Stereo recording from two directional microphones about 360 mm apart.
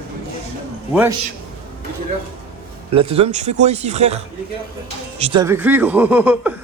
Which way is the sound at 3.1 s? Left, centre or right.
Centre.